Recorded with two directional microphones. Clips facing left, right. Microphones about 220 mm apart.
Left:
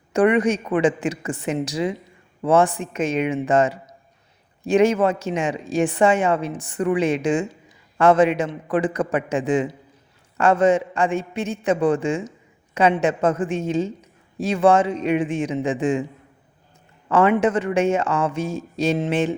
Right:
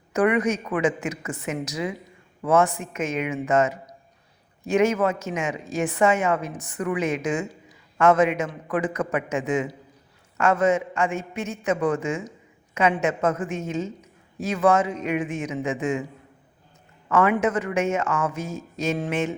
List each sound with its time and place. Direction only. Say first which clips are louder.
0.1 s a woman's voice: left 4 dB; 30° left (ahead or behind)
17.1 s a woman's voice: left 3 dB; 30° left (ahead or behind)